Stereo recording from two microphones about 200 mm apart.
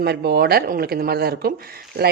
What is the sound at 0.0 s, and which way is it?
Speech, 55° right (ahead or behind).